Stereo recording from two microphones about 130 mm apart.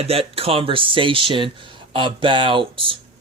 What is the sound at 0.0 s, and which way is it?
Speech, 50° right (ahead or behind).